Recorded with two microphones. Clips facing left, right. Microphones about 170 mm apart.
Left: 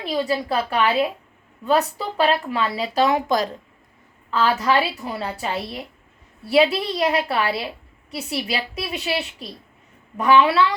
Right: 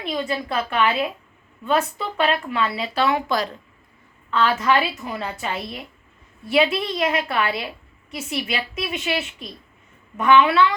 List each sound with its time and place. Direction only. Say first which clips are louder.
0.0 s speech: left 3 dB; 35° left (ahead or behind)